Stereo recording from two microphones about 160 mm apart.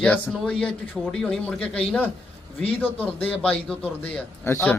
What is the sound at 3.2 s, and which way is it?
Speech, 10° left (ahead or behind).